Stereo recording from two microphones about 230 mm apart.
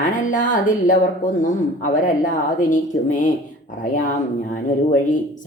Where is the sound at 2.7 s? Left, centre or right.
Left.